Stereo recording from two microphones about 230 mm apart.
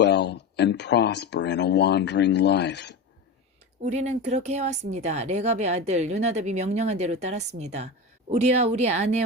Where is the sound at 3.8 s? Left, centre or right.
Right.